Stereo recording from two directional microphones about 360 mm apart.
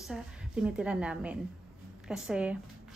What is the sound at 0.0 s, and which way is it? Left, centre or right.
A woman's voice, centre.